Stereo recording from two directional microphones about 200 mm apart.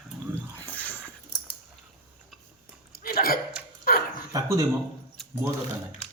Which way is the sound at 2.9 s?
50° left (ahead or behind).